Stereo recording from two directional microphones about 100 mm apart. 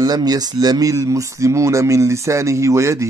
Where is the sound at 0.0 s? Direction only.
40° right (ahead or behind).